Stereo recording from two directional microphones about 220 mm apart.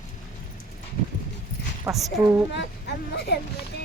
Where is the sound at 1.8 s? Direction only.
5° right (ahead or behind).